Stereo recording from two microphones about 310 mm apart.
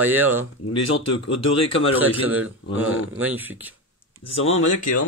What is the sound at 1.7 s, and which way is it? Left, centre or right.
Speech, left.